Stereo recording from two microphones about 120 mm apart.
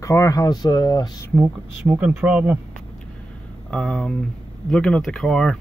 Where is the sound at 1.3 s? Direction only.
10° right (ahead or behind).